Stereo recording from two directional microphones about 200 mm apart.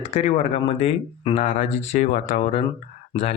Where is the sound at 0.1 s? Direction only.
35° left (ahead or behind).